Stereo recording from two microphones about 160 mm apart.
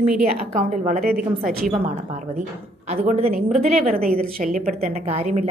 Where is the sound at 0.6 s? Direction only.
50° right (ahead or behind).